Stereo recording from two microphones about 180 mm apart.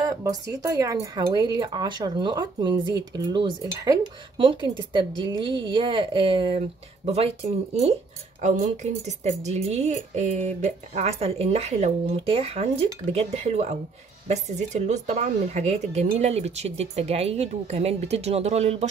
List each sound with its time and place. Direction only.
0.0 s speech: 20° right (ahead or behind); by 7.9 s 35° right (ahead or behind)
9.0 s speech: 40° right (ahead or behind)